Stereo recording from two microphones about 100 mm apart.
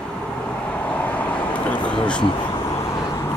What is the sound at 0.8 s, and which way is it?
Vehicle, 15° left (ahead or behind).